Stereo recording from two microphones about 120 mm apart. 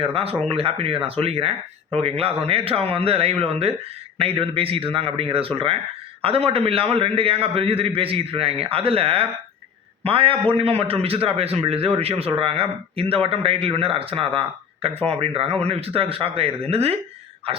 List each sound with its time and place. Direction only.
0.0 s a man's voice: 50° right (ahead or behind)